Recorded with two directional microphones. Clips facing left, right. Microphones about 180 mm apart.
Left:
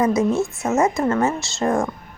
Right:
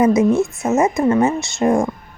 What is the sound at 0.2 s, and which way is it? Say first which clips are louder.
Speech: right 4 dB; 20° right (ahead or behind).